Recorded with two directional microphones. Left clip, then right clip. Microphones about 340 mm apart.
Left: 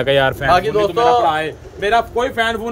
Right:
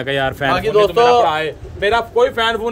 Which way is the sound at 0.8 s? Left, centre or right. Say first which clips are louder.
Right 2 dB; right.